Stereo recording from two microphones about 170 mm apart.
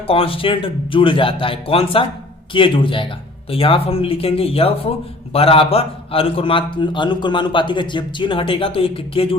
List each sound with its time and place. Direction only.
0.1 s a man's voice: 35° left (ahead or behind)